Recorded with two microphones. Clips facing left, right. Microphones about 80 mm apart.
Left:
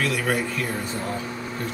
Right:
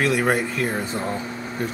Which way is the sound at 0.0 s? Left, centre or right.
Right.